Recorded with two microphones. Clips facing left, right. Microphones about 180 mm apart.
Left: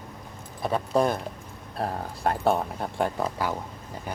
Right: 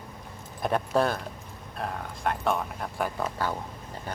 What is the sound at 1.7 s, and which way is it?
Speech, 35° left (ahead or behind).